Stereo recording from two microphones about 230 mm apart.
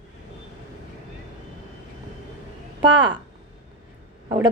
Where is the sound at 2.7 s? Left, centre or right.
Centre.